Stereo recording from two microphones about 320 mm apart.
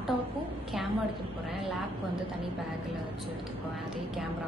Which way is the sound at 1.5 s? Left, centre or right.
Centre.